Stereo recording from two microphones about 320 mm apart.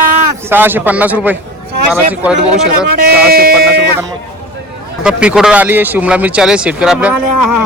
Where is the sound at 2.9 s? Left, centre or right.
Right.